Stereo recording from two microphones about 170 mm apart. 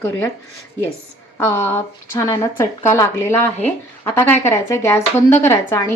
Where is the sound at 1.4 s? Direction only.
15° left (ahead or behind).